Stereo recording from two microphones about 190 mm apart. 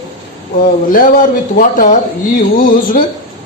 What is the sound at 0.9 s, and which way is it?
A man's voice, 45° left (ahead or behind).